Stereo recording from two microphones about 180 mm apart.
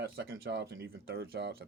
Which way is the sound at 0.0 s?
70° right (ahead or behind).